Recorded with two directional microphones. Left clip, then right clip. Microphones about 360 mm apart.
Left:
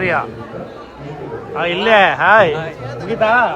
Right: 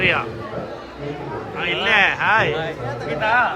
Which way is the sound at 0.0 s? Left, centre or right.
Centre.